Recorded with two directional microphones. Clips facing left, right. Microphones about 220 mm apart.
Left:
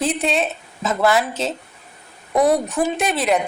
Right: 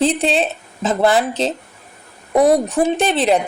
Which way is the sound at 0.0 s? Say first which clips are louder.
Right 4 dB; 30° right (ahead or behind).